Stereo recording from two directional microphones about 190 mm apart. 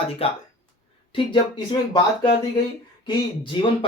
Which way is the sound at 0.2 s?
30° left (ahead or behind).